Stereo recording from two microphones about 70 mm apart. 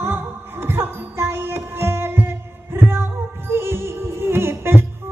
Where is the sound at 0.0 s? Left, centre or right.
Right.